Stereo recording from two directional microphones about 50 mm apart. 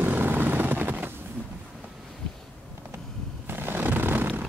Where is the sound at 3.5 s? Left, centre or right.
Right.